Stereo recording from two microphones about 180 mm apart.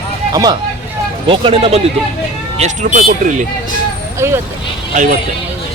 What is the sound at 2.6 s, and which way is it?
Speech, 40° right (ahead or behind).